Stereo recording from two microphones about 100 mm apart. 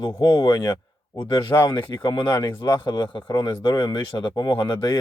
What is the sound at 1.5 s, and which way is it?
Speech, 20° left (ahead or behind).